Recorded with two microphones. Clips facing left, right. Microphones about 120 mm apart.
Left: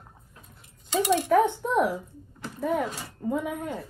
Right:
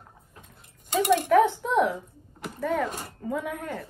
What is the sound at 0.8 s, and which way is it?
Speech, 55° right (ahead or behind).